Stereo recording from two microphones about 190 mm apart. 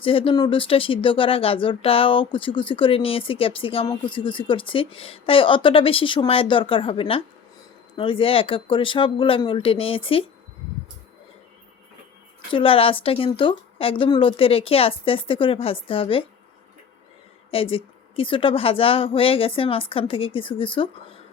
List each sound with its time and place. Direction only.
0.0 s speech: 30° left (ahead or behind)
12.5 s speech: 30° left (ahead or behind)
17.5 s speech: 30° left (ahead or behind)